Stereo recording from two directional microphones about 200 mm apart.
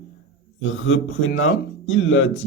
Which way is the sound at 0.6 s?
75° left (ahead or behind).